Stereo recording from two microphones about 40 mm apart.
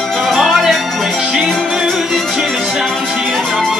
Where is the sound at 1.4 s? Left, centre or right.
Centre.